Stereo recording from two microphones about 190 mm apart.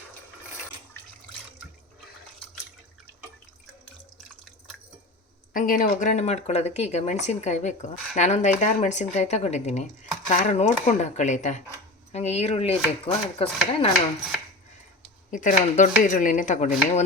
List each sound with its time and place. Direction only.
5.5 s speech: 45° left (ahead or behind); by 13.9 s 30° left (ahead or behind)
15.3 s speech: 45° left (ahead or behind)